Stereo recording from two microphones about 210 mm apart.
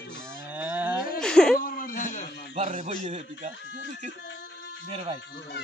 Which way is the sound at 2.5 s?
35° right (ahead or behind).